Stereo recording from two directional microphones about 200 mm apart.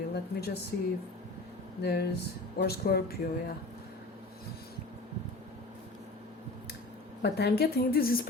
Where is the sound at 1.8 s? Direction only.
55° left (ahead or behind).